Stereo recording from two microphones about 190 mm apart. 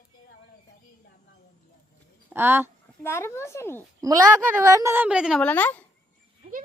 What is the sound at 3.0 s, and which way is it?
Speech, 15° left (ahead or behind).